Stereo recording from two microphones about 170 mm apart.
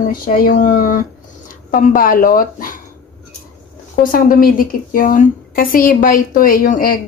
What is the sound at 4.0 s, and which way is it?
A woman's voice, 55° left (ahead or behind).